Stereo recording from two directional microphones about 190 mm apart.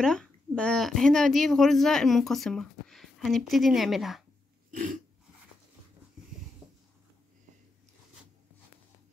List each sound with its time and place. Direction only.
0.0 s speech: 5° left (ahead or behind)
4.6 s throat clearing: 45° right (ahead or behind)